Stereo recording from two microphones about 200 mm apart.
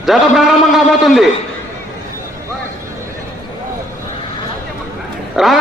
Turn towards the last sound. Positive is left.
turn(degrees=0)  # may be behind; listen again after turning